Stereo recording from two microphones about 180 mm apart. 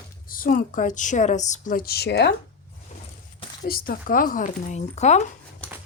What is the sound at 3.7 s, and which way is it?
A woman's voice, 55° left (ahead or behind).